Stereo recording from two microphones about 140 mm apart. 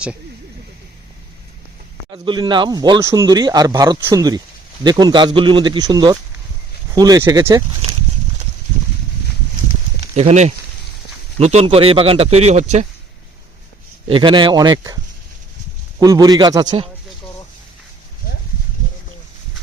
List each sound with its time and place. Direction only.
2.1 s speech: 35° right (ahead or behind)
10.2 s speech: 55° right (ahead or behind)
14.1 s speech: 35° right (ahead or behind)
16.0 s speech: 30° right (ahead or behind)